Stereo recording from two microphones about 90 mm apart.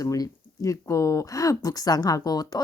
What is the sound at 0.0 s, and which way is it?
A woman's voice, 40° left (ahead or behind).